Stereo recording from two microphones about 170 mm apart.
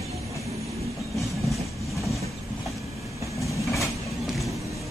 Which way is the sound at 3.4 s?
20° left (ahead or behind).